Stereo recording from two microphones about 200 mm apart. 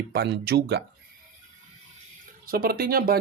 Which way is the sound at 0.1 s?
55° right (ahead or behind).